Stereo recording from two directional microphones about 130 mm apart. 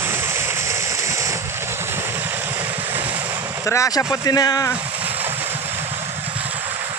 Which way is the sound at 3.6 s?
20° left (ahead or behind).